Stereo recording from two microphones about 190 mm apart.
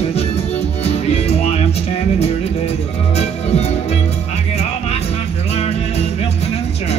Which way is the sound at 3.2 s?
35° left (ahead or behind).